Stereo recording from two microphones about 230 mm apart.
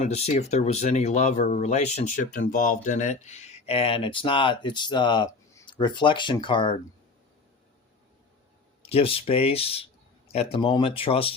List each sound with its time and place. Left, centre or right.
0.0 s speech: left
8.8 s speech: left